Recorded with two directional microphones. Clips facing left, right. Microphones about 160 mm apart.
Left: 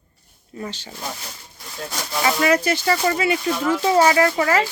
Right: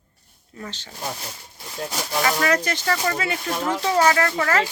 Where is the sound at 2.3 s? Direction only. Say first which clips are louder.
Left 5 dB; 10° left (ahead or behind).